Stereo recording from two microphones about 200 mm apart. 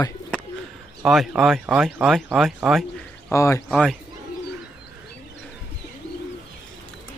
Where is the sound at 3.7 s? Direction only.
Centre (ahead or behind).